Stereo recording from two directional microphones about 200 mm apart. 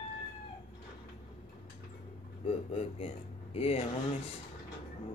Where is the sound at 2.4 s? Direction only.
30° left (ahead or behind).